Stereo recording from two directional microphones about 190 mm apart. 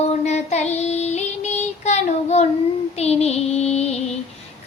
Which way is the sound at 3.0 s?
35° left (ahead or behind).